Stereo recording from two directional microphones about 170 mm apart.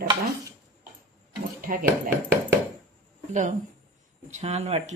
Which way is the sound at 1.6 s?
55° right (ahead or behind).